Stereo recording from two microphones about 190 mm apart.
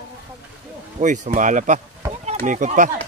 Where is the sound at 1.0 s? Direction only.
40° right (ahead or behind).